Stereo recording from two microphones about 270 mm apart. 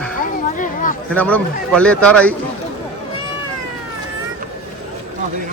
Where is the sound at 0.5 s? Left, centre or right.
Left.